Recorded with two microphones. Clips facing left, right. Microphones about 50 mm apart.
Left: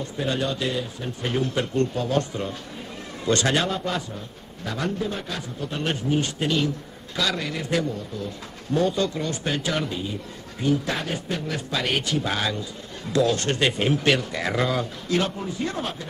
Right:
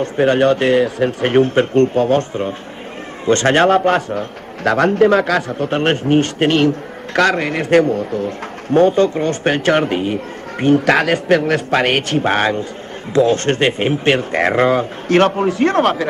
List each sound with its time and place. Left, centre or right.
0.0 s a man's voice: right
1.2 s a man's voice: right
5.6 s a man's voice: right
10.9 s speech: right
13.1 s speech: right
14.3 s speech: right
15.1 s a man's voice: right